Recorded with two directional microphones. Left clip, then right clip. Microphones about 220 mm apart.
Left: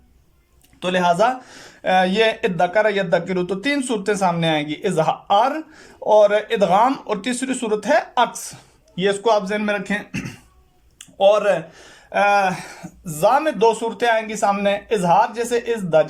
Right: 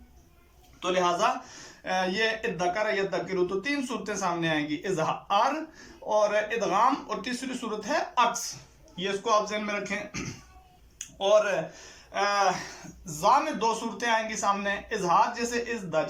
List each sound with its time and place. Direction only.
0.8 s speech: 45° left (ahead or behind)
10.9 s a sound: 50° left (ahead or behind)
12.1 s speech: 50° left (ahead or behind)